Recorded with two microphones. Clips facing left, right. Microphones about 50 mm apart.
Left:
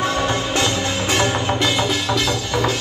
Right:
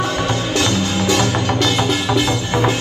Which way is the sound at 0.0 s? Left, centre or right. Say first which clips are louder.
Even; left.